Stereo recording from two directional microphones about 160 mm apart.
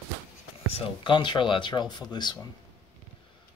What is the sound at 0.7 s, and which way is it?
Speech, 30° left (ahead or behind).